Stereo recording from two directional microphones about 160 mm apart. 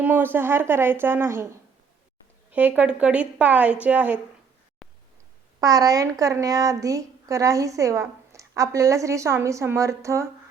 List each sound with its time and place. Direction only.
0.0 s a woman's voice: 10° right (ahead or behind)
2.5 s a woman's voice: 10° right (ahead or behind)
4.8 s a sound: centre (ahead or behind)
5.5 s a woman's voice: 20° right (ahead or behind)